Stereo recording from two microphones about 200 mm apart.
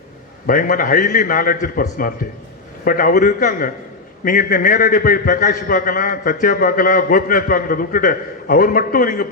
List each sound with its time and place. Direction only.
0.4 s a man's voice: 45° left (ahead or behind)